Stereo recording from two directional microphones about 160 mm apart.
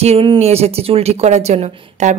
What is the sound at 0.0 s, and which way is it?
Speech, 35° right (ahead or behind).